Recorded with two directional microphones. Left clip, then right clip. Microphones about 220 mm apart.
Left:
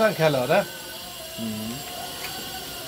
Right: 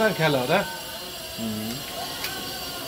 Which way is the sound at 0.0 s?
30° left (ahead or behind).